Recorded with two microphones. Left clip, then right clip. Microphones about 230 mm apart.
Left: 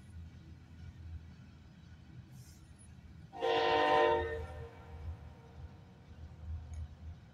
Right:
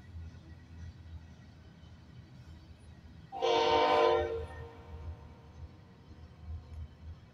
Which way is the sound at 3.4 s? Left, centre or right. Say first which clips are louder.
Right 3 dB; right.